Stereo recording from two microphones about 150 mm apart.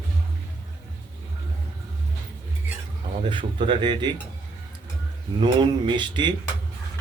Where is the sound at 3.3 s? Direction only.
35° right (ahead or behind).